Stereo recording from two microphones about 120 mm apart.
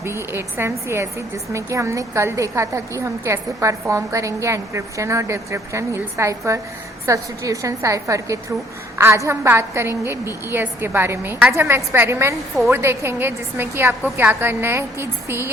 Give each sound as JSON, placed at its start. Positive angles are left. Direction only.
{"t": 0.0, "sound": "a woman's voice", "side_deg": -20}